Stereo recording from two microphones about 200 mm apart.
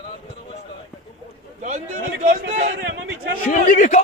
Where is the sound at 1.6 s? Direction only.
40° right (ahead or behind).